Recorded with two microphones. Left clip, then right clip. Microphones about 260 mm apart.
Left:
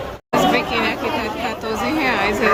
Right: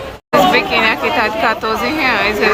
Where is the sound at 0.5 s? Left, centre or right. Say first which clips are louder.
Right 6 dB; centre.